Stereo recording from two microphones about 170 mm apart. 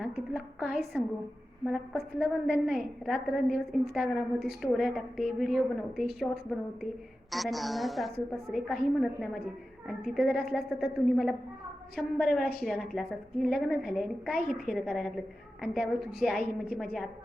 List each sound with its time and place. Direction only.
0.0 s a woman's voice: 5° right (ahead or behind)
7.3 s a woman's voice: centre (ahead or behind)